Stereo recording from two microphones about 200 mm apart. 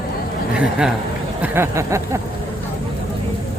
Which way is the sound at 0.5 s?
5° right (ahead or behind).